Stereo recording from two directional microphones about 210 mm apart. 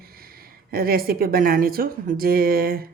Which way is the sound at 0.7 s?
45° right (ahead or behind).